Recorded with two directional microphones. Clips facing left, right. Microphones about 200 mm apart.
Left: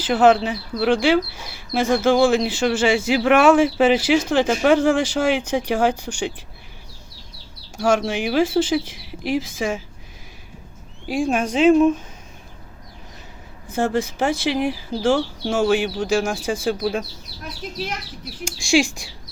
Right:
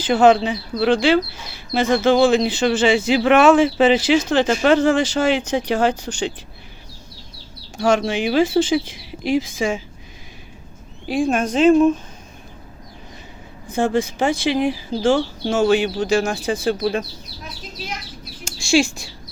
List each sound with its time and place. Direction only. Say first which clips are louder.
0.0 s speech: right 2 dB; 5° left (ahead or behind)
7.8 s speech: right 2 dB; 5° left (ahead or behind)
11.1 s speech: right 2 dB; 10° left (ahead or behind)
13.7 s speech: right 2 dB; 5° left (ahead or behind)
18.4 s speech: right 1 dB; 15° left (ahead or behind)